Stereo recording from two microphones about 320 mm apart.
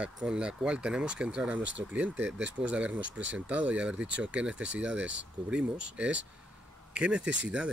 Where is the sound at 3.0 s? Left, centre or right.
Right.